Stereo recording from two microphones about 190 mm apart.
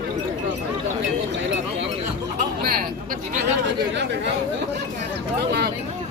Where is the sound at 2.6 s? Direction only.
50° right (ahead or behind).